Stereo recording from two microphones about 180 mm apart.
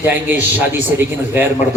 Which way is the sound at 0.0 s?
10° right (ahead or behind).